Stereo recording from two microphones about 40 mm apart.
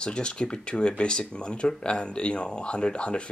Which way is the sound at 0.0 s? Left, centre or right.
Left.